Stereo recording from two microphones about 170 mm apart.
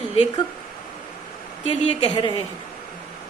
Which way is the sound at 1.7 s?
30° left (ahead or behind).